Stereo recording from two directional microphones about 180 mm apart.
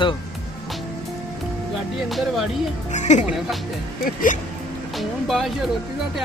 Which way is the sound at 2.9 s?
40° left (ahead or behind).